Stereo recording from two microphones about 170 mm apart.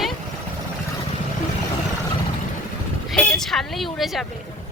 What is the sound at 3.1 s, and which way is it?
A woman's voice, 5° left (ahead or behind).